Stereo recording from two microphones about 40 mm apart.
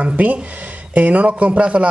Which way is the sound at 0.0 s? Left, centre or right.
Right.